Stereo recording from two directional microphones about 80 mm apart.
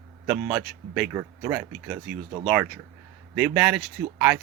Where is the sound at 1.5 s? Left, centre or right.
Centre.